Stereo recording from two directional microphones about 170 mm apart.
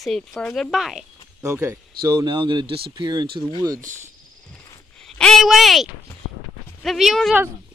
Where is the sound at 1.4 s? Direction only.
15° right (ahead or behind).